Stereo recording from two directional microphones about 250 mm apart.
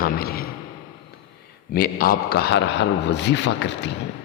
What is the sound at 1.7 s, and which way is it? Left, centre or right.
A man's voice, left.